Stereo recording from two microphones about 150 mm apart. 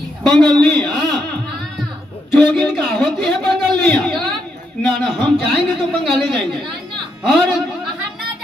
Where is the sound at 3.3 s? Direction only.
5° left (ahead or behind).